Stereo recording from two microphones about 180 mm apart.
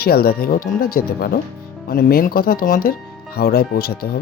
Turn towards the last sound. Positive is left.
turn(degrees=60)  # may be behind; listen again after turning